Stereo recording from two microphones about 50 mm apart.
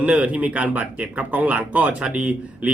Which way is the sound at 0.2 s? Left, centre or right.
Right.